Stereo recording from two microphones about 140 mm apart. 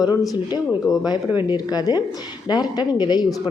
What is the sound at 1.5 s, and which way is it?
A woman's voice, 30° left (ahead or behind).